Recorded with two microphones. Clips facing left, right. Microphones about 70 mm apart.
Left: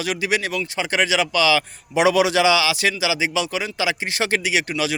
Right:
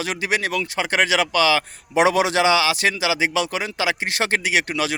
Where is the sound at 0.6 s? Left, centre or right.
Right.